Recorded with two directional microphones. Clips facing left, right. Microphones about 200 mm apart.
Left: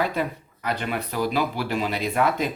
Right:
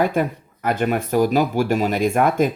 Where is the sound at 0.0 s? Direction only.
50° right (ahead or behind).